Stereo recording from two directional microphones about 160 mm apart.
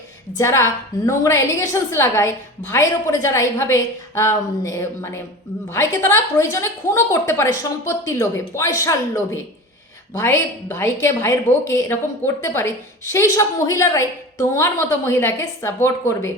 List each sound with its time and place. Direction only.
0.3 s a woman's voice: 20° left (ahead or behind)